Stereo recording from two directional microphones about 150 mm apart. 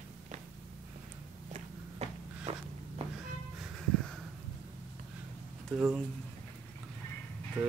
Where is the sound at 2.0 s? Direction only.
40° right (ahead or behind).